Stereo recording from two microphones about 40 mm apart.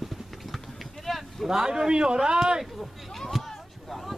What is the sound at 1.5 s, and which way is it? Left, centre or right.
A man's voice, centre.